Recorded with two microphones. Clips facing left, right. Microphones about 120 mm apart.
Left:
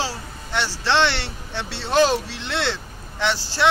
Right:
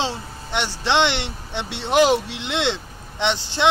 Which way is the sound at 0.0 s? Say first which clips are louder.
Right 2 dB; 20° right (ahead or behind).